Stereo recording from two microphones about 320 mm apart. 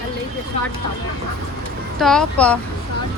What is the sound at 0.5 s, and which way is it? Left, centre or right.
Speech, centre.